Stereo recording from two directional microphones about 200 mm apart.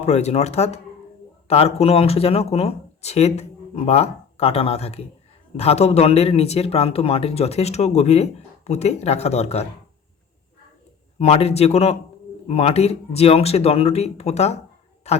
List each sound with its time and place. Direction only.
0.0 s speech: 35° left (ahead or behind)
11.2 s speech: 30° left (ahead or behind)